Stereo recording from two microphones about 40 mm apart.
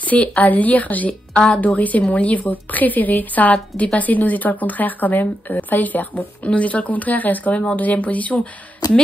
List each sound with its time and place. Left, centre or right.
0.0 s a woman's voice: left
1.3 s speech: left
1.8 s speech: left